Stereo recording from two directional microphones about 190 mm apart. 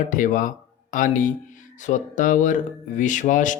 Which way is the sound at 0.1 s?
45° left (ahead or behind).